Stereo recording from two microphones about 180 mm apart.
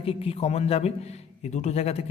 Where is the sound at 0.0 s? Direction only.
30° left (ahead or behind).